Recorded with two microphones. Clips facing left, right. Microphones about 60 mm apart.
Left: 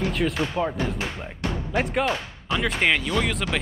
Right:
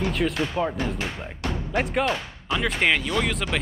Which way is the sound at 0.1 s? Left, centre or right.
Centre.